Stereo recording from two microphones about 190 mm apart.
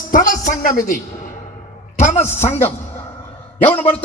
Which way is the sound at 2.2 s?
10° left (ahead or behind).